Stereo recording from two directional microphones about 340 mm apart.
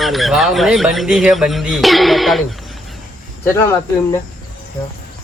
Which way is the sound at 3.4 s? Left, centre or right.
Centre.